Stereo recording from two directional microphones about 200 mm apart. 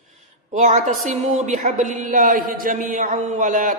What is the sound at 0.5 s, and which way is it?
A woman's voice, 40° right (ahead or behind).